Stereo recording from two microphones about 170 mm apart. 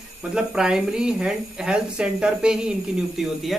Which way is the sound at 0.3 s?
5° right (ahead or behind).